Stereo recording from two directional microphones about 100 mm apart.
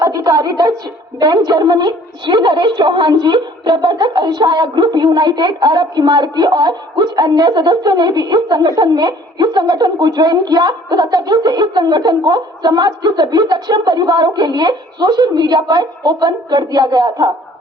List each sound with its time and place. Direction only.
0.0 s a woman's voice: 40° right (ahead or behind)